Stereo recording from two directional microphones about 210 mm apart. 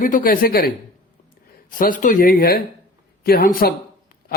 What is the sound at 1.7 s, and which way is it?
Speech, 40° left (ahead or behind).